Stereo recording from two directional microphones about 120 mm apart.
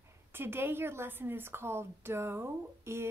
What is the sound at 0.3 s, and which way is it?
Speech, 20° right (ahead or behind).